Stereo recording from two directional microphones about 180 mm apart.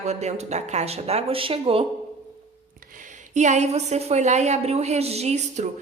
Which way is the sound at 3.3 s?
40° right (ahead or behind).